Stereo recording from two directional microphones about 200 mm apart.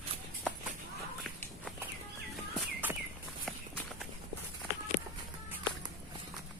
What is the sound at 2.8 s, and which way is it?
Walk, 10° right (ahead or behind).